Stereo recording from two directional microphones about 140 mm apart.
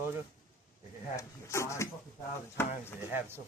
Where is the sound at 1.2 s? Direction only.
20° left (ahead or behind).